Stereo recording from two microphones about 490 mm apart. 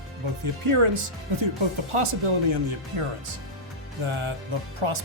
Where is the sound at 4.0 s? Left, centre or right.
Right.